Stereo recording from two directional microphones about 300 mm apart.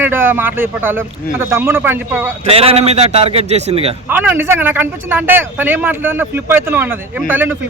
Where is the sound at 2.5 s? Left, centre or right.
Centre.